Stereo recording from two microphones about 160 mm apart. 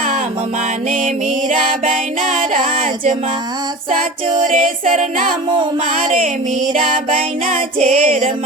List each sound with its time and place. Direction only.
0.9 s music: 55° right (ahead or behind)
4.4 s music: 55° right (ahead or behind)
6.7 s music: 55° right (ahead or behind)